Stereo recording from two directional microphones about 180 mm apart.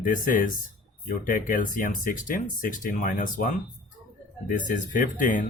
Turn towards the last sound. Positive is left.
turn(degrees=45)  # may be behind; listen again after turning